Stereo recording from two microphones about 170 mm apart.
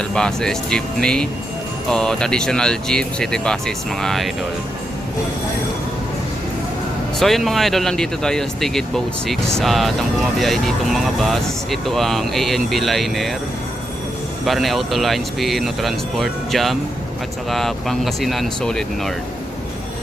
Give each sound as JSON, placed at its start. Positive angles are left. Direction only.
{"t": 0.1, "sound": "speech", "side_deg": 5}
{"t": 7.2, "sound": "speech", "side_deg": 0}
{"t": 14.4, "sound": "speech", "side_deg": 0}